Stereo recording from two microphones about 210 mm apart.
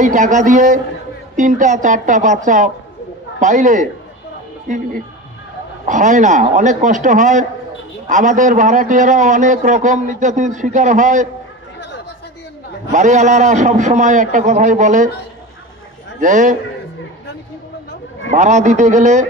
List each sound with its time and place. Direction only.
0.0 s a man's voice: 35° right (ahead or behind)
12.9 s a man's voice: 35° right (ahead or behind)
16.2 s a man's voice: 35° right (ahead or behind)
18.3 s a man's voice: 35° right (ahead or behind)